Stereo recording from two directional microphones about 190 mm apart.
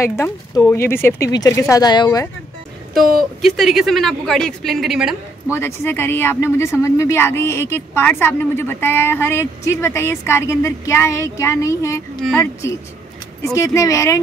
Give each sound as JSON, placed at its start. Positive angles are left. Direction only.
{"t": 0.0, "sound": "speech", "side_deg": 15}
{"t": 3.2, "sound": "speech", "side_deg": 0}
{"t": 5.5, "sound": "speech", "side_deg": 15}